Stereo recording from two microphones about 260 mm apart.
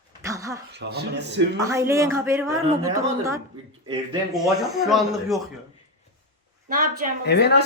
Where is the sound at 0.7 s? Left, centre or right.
Right.